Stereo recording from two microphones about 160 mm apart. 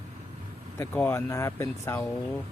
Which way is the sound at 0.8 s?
15° left (ahead or behind).